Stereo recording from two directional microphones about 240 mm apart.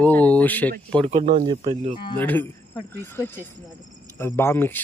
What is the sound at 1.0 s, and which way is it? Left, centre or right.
Speech, right.